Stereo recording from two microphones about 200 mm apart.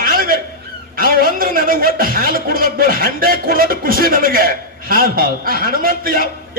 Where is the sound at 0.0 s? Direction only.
45° right (ahead or behind).